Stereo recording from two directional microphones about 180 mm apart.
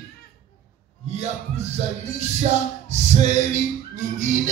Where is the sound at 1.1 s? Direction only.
35° right (ahead or behind).